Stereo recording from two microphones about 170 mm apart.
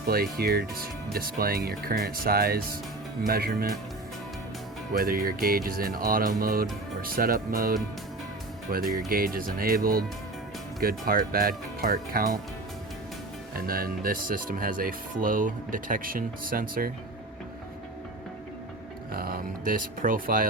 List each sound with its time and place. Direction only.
0.1 s speech: 65° right (ahead or behind)
4.9 s speech: 60° right (ahead or behind)
8.7 s speech: 60° right (ahead or behind)
13.6 s speech: 60° right (ahead or behind)
19.1 s speech: 60° right (ahead or behind)